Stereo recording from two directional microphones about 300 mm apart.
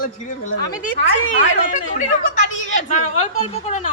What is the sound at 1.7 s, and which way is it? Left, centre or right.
Speech, left.